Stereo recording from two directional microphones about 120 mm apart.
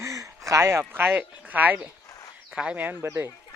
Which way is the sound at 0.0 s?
25° right (ahead or behind).